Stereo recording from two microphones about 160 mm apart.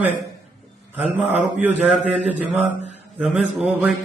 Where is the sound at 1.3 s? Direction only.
45° right (ahead or behind).